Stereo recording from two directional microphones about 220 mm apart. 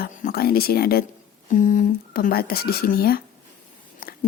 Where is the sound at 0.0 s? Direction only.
40° left (ahead or behind).